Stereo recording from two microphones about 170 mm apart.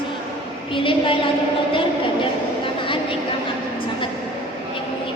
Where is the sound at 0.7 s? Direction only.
30° left (ahead or behind).